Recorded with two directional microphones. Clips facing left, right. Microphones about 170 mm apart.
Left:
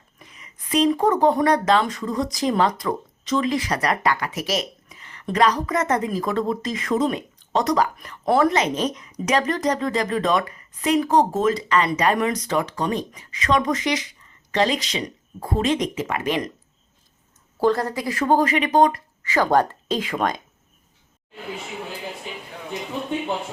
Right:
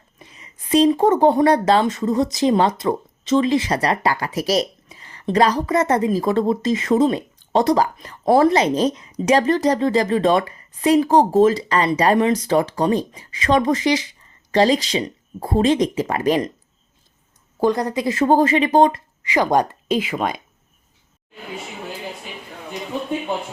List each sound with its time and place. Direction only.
0.2 s speech: 30° right (ahead or behind)
17.6 s speech: 15° right (ahead or behind)